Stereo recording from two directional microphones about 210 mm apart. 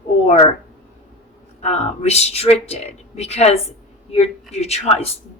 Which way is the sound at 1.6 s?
30° left (ahead or behind).